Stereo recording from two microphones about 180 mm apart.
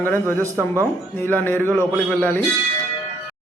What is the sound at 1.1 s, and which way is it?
A man's voice, 10° left (ahead or behind).